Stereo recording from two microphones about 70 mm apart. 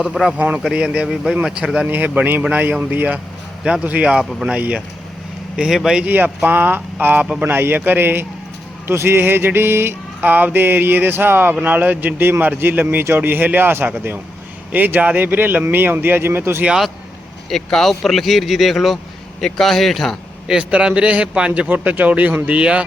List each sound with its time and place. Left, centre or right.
0.3 s speech: right
0.7 s speech: centre
1.1 s speech: centre
1.5 s speech: centre
1.9 s speech: right
4.2 s speech: centre
4.5 s speech: centre
5.5 s speech: centre
6.1 s speech: right
7.4 s mantra: right
11.5 s speech: right
16.6 s speech: centre
17.5 s speech: centre
20.5 s speech: centre